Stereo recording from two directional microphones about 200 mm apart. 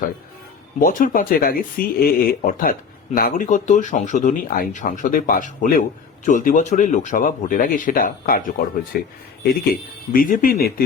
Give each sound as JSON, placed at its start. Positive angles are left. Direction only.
{"t": 0.8, "sound": "speech", "side_deg": 45}
{"t": 10.1, "sound": "speech", "side_deg": 45}